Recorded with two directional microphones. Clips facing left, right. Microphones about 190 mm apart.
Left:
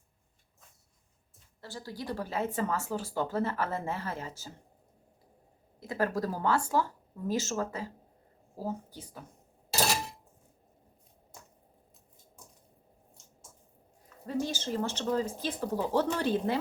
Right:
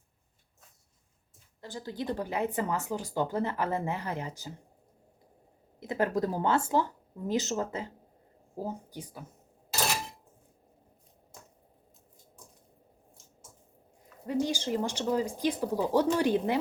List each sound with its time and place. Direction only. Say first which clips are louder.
1.6 s speech: right 4 dB; 20° right (ahead or behind)
5.8 s a woman's voice: right 2 dB; 20° right (ahead or behind)
14.3 s speech: right 3 dB; 15° right (ahead or behind)